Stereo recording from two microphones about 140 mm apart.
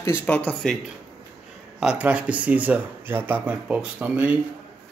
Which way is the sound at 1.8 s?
10° right (ahead or behind).